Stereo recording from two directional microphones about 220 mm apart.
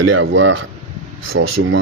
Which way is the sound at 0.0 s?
60° right (ahead or behind).